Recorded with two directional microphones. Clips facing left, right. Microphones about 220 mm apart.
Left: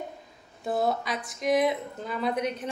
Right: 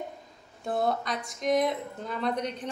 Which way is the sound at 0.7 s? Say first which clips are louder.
Left 1 dB; 5° left (ahead or behind).